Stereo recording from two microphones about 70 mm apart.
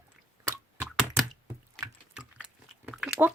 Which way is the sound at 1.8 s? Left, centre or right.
Centre.